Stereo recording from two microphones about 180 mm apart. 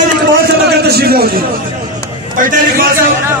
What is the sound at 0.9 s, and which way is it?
Speech, 60° right (ahead or behind).